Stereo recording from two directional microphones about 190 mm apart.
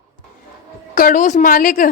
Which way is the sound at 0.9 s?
45° left (ahead or behind).